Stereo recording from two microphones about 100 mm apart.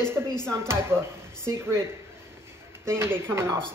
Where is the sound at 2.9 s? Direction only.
25° right (ahead or behind).